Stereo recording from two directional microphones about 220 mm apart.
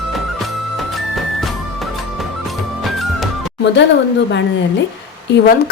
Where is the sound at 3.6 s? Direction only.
50° left (ahead or behind).